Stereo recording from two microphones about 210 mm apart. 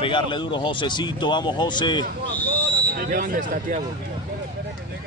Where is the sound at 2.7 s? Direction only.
45° right (ahead or behind).